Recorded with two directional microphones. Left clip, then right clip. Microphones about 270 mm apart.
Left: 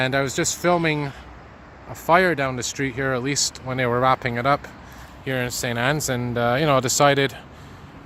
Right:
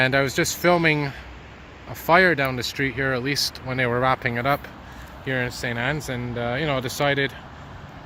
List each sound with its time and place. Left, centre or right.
0.0 s speech: centre; by 7.3 s left